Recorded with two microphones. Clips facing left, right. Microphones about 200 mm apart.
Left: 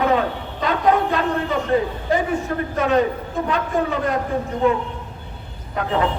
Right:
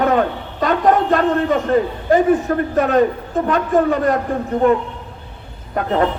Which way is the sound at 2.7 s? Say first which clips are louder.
Right 3 dB; 45° right (ahead or behind).